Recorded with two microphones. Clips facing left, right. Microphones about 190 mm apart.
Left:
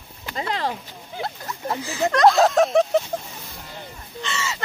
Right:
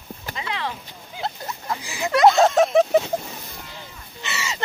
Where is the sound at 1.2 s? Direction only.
15° right (ahead or behind).